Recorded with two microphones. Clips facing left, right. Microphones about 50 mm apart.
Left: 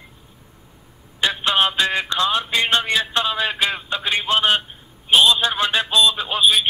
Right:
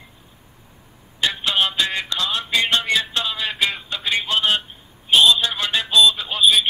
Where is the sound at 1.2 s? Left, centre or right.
Left.